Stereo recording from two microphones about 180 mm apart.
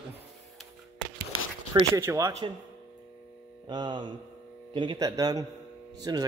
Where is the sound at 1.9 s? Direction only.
15° right (ahead or behind).